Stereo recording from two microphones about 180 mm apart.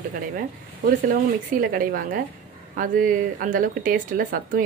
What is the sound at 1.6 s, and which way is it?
Speech, 50° right (ahead or behind).